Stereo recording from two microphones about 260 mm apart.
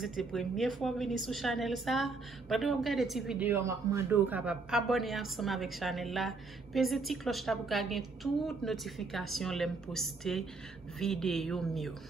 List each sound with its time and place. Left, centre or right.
0.0 s a woman's voice: centre